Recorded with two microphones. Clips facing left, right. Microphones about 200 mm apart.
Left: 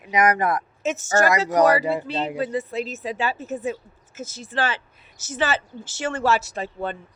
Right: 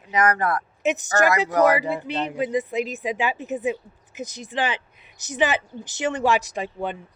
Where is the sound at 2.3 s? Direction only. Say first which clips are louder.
Right 2 dB; 15° right (ahead or behind).